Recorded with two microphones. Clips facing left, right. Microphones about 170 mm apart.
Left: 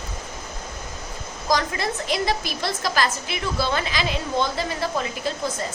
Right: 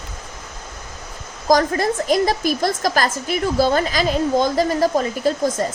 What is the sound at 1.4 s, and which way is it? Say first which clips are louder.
A woman's voice: right 7 dB; 45° right (ahead or behind).